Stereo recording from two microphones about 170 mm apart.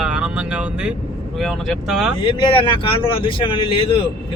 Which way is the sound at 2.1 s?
30° left (ahead or behind).